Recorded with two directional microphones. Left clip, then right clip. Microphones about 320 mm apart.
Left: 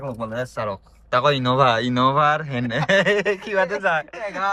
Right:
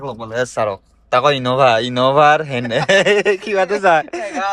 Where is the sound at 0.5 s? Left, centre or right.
Centre.